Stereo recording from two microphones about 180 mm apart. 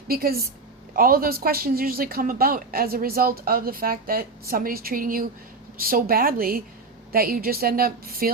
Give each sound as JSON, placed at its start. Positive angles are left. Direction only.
{"t": 0.1, "sound": "a woman's voice", "side_deg": -55}